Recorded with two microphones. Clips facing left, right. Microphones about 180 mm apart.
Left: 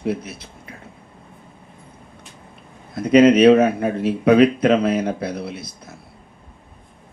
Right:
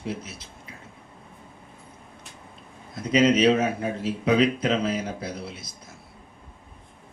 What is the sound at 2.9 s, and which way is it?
A man's voice, 60° left (ahead or behind).